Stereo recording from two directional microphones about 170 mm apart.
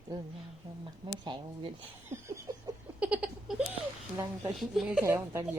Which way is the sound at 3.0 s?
5° right (ahead or behind).